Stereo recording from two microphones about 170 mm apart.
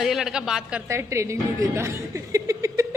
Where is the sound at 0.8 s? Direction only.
15° right (ahead or behind).